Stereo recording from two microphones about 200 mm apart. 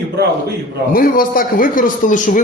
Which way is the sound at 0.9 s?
45° left (ahead or behind).